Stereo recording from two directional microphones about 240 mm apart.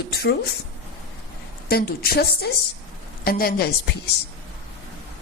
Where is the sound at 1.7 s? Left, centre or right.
Left.